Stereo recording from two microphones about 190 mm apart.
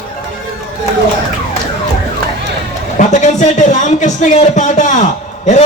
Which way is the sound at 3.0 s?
40° left (ahead or behind).